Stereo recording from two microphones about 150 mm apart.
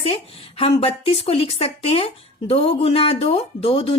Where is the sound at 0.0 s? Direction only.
40° left (ahead or behind).